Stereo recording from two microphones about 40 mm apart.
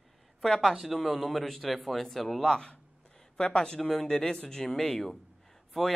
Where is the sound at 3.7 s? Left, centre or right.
Centre.